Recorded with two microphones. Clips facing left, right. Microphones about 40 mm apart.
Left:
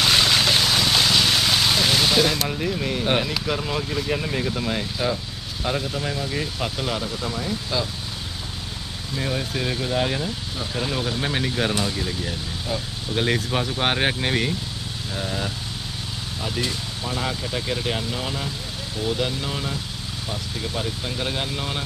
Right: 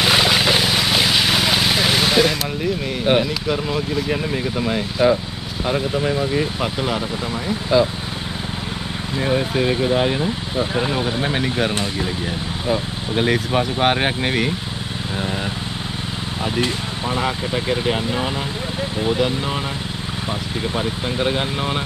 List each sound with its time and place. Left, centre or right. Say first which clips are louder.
0.0 s vehicle: right 3 dB; centre
2.3 s speech: right 3 dB; centre
9.1 s speech: right 7 dB; right
15.1 s speech: right 3 dB; right
16.4 s speech: right 5 dB; right
20.7 s speech: right 5 dB; right